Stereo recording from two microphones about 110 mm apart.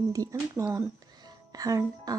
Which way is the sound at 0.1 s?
30° right (ahead or behind).